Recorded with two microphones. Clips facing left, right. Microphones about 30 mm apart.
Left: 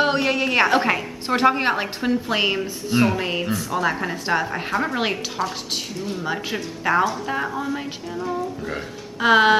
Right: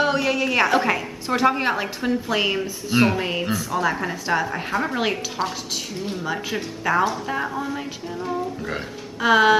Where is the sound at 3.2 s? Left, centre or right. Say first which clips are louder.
Even; centre.